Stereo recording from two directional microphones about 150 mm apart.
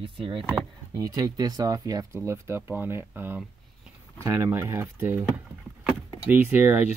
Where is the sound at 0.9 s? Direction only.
25° right (ahead or behind).